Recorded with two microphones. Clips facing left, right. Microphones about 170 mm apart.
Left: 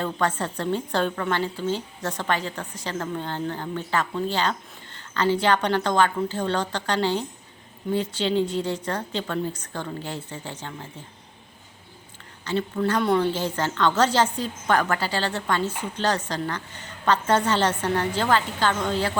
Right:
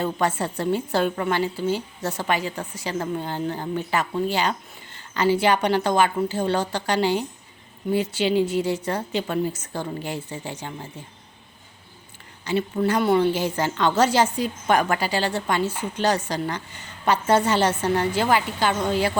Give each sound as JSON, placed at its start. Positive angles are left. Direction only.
{"t": 0.0, "sound": "a woman's voice", "side_deg": -10}
{"t": 12.5, "sound": "a woman's voice", "side_deg": -10}